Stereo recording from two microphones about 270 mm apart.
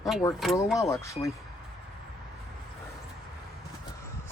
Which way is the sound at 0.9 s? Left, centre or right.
Centre.